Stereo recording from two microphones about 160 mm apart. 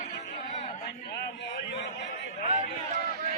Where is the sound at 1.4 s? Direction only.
90° left.